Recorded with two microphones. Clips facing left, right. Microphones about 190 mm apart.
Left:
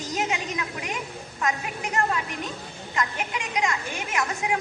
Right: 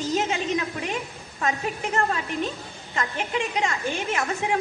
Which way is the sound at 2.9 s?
30° right (ahead or behind).